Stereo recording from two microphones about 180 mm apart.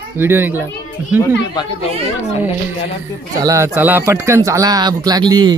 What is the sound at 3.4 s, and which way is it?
Speech, 20° right (ahead or behind).